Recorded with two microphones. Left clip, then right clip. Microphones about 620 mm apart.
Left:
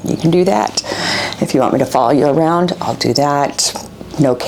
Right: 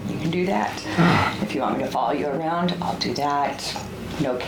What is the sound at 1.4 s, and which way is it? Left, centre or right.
Speech, left.